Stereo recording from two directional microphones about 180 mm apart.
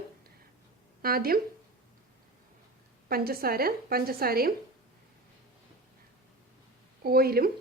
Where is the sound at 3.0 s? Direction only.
55° right (ahead or behind).